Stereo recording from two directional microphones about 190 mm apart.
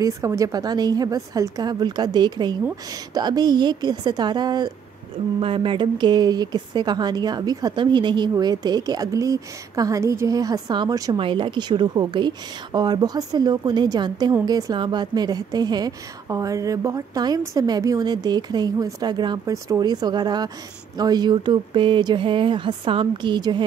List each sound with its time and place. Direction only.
0.0 s a woman's voice: 15° right (ahead or behind)